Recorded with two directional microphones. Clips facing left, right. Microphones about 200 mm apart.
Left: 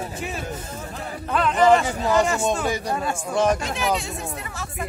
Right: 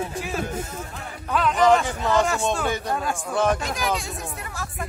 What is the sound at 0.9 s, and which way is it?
Speech, 35° left (ahead or behind).